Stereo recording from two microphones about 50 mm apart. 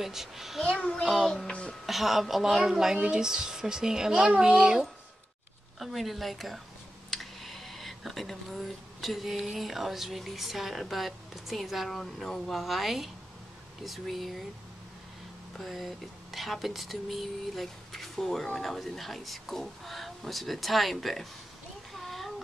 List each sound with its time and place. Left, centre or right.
0.0 s speech: centre
0.6 s a child's voice: centre
1.0 s speech: centre
5.8 s speech: centre
15.6 s speech: centre
21.9 s a sound: centre